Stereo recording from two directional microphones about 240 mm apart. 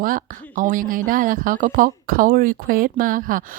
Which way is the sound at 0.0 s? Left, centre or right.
Right.